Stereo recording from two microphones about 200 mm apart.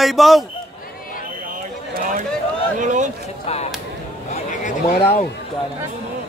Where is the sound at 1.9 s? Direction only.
45° right (ahead or behind).